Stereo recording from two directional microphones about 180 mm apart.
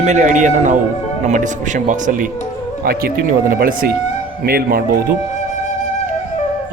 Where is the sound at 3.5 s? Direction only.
50° right (ahead or behind).